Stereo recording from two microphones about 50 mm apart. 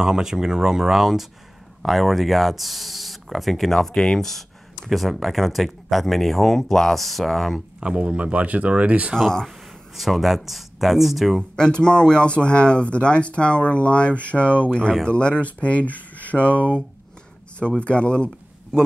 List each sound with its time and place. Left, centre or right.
0.0 s speech: centre
7.8 s speech: right
9.1 s speech: centre
9.9 s speech: centre
11.5 s speech: centre